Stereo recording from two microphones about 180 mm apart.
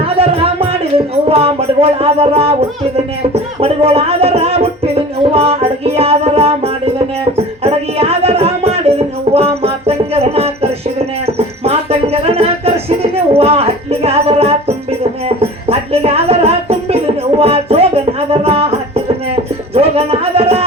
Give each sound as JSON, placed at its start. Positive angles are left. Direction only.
{"t": 0.0, "sound": "music", "side_deg": -30}
{"t": 15.9, "sound": "music", "side_deg": -35}